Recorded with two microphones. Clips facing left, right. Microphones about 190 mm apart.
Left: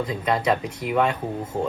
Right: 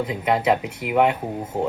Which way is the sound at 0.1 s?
20° right (ahead or behind).